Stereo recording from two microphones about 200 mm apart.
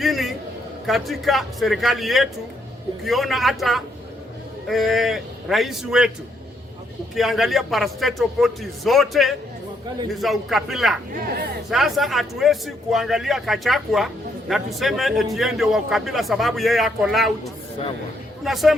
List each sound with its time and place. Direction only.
0.0 s a man's voice: centre (ahead or behind)
7.2 s a man's voice: centre (ahead or behind)
18.4 s a man's voice: centre (ahead or behind)